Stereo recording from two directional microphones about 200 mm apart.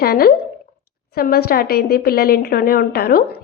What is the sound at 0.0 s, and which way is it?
A woman's voice, 50° left (ahead or behind).